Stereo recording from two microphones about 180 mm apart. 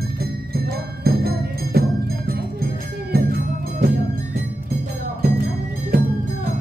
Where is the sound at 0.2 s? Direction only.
60° right (ahead or behind).